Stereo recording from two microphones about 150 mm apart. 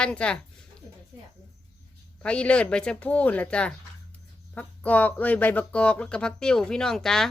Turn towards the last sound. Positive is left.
turn(degrees=5)  # may be behind; listen again after turning